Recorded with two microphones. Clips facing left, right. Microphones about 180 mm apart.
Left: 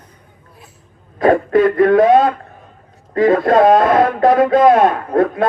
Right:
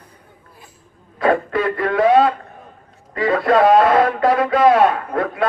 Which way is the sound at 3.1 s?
45° left (ahead or behind).